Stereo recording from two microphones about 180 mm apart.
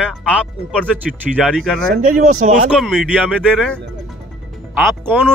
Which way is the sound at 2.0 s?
45° right (ahead or behind).